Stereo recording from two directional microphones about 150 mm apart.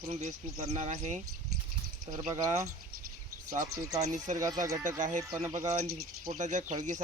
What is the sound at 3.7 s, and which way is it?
Speech, 25° right (ahead or behind).